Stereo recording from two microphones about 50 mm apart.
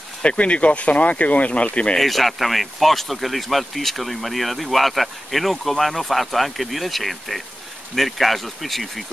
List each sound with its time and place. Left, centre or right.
0.2 s speech: left
2.0 s speech: centre